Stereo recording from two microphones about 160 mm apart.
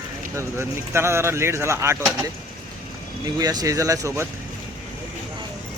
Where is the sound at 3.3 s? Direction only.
25° right (ahead or behind).